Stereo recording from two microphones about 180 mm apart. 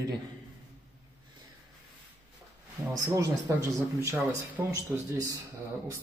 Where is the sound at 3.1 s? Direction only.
20° right (ahead or behind).